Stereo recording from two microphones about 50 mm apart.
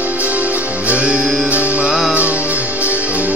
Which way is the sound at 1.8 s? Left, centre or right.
Centre.